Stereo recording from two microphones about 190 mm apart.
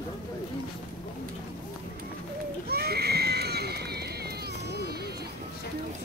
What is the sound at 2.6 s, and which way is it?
Neigh, 55° right (ahead or behind).